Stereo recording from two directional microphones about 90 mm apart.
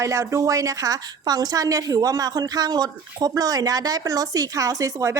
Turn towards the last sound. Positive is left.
turn(degrees=-35)  # may be behind; listen again after turning